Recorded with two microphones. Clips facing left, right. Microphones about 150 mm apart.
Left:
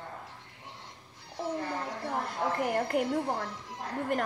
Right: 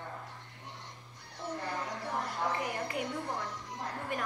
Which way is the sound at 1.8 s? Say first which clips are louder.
Left 3 dB; 60° left (ahead or behind).